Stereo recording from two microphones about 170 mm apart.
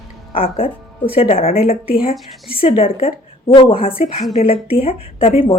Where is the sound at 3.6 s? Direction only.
30° left (ahead or behind).